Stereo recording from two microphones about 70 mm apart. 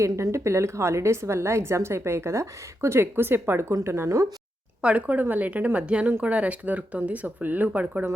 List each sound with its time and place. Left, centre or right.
0.0 s speech: right
4.8 s speech: centre
6.1 s speech: right